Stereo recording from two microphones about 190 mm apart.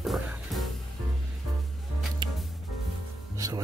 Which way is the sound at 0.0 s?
Centre (ahead or behind).